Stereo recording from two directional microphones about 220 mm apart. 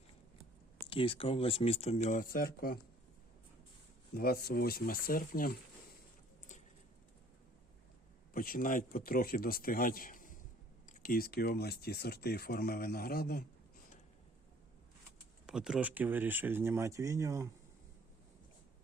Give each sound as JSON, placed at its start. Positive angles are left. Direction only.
{"t": 0.9, "sound": "speech", "side_deg": 25}
{"t": 4.1, "sound": "speech", "side_deg": 45}
{"t": 8.3, "sound": "speech", "side_deg": 40}
{"t": 15.4, "sound": "speech", "side_deg": -5}